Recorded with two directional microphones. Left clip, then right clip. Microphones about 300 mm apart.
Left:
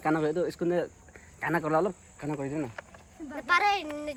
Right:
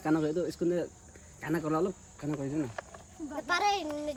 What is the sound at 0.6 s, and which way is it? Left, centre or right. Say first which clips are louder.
Speech: left 2 dB; centre.